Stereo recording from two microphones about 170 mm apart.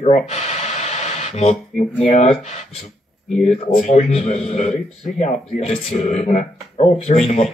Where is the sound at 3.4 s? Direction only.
40° left (ahead or behind).